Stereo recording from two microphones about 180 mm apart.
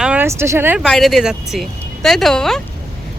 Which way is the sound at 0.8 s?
Centre (ahead or behind).